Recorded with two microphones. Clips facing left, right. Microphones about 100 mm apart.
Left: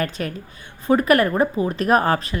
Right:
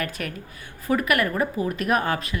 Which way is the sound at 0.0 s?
30° left (ahead or behind).